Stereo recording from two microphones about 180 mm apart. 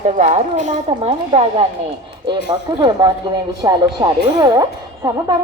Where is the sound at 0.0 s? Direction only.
40° right (ahead or behind).